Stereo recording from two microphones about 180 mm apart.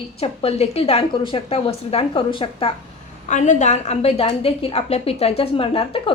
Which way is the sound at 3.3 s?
40° left (ahead or behind).